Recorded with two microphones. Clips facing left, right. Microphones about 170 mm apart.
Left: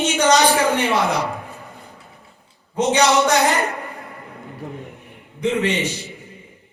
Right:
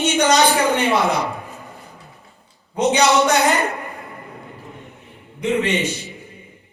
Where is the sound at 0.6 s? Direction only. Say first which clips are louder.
Right 1 dB; 20° right (ahead or behind).